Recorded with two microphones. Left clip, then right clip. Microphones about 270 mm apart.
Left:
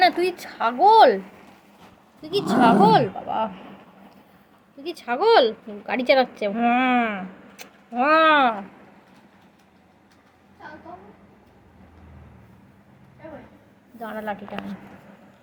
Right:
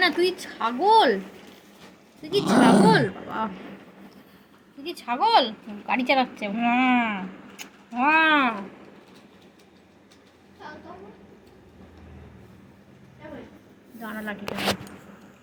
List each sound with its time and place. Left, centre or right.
0.0 s a woman's voice: left
2.4 s speech: centre
3.0 s a woman's voice: left
4.8 s a woman's voice: left
14.0 s a woman's voice: left